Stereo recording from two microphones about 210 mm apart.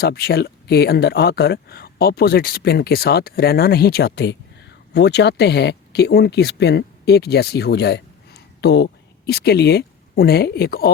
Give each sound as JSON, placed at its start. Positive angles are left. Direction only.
{"t": 0.0, "sound": "speech", "side_deg": 50}